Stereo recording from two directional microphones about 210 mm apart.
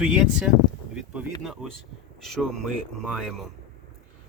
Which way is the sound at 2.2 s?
Centre (ahead or behind).